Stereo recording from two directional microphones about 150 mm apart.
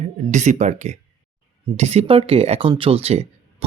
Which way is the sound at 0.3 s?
50° right (ahead or behind).